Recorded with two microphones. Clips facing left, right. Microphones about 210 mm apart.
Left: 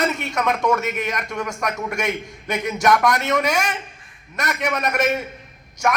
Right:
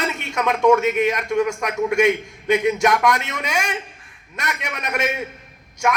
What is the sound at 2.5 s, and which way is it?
A man's voice, 40° left (ahead or behind).